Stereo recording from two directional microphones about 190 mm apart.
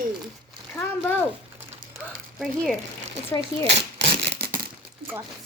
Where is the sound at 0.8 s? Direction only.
10° left (ahead or behind).